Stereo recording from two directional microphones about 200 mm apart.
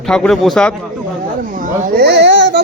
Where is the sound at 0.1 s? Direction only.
Centre (ahead or behind).